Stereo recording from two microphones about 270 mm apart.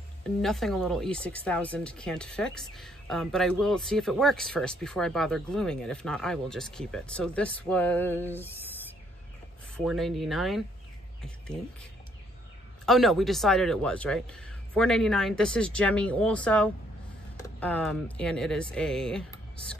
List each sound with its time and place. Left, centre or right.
0.4 s speech: centre
9.8 s speech: centre
12.8 s speech: centre
19.3 s a sound: centre